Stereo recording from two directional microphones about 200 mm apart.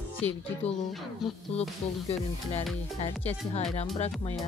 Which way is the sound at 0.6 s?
30° left (ahead or behind).